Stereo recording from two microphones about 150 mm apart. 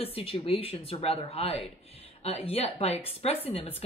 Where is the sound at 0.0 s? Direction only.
40° left (ahead or behind).